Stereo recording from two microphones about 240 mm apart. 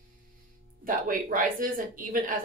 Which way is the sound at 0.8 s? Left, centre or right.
Right.